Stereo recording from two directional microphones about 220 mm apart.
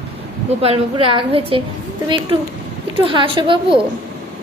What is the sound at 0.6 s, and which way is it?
A woman's voice, 25° right (ahead or behind).